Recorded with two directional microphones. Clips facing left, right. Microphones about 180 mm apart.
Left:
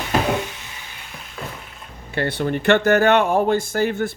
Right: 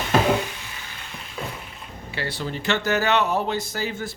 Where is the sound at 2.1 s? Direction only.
55° left (ahead or behind).